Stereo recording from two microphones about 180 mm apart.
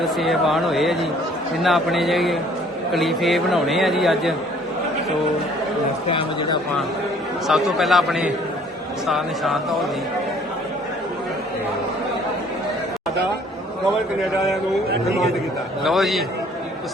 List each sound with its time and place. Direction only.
0.0 s a man's voice: centre (ahead or behind)
6.1 s speech: 30° left (ahead or behind)
7.4 s a man's voice: centre (ahead or behind)
15.8 s a man's voice: centre (ahead or behind)